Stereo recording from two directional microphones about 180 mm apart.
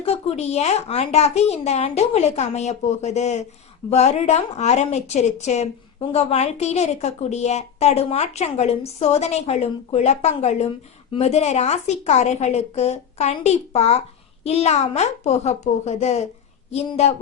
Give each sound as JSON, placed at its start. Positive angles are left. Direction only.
{"t": 0.0, "sound": "a woman's voice", "side_deg": 35}